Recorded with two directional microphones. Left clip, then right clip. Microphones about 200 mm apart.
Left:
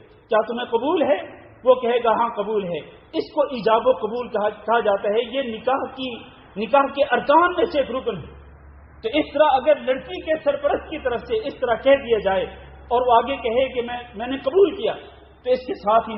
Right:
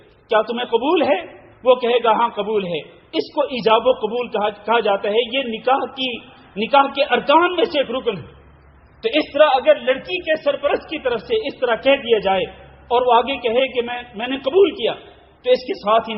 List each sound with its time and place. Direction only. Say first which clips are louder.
0.3 s a man's voice: right 3 dB; 30° right (ahead or behind)
9.0 s a man's voice: right 4 dB; 30° right (ahead or behind)